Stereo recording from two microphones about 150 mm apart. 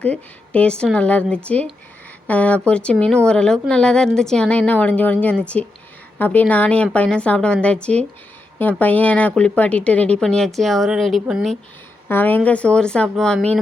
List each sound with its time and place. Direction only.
0.0 s a woman's voice: 10° left (ahead or behind)
12.0 s a woman's voice: 15° left (ahead or behind)